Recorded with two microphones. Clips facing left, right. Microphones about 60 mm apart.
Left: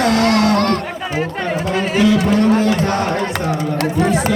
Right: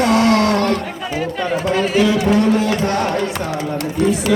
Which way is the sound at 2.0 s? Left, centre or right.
Left.